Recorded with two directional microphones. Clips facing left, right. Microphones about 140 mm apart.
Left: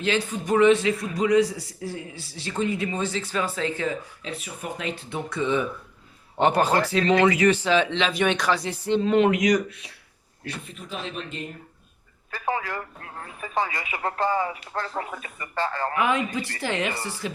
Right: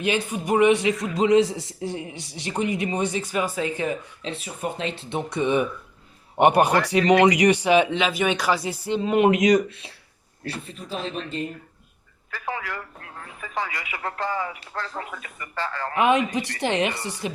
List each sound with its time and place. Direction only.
0.0 s a man's voice: 15° right (ahead or behind); by 11.4 s 35° right (ahead or behind)
12.3 s a man's voice: 30° left (ahead or behind)
16.0 s a man's voice: 20° right (ahead or behind)